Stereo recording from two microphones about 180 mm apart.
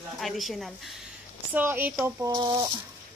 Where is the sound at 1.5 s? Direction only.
10° right (ahead or behind).